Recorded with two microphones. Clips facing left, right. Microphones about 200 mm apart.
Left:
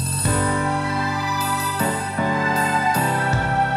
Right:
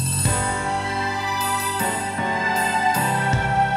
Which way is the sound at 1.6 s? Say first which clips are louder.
Left 2 dB; 40° left (ahead or behind).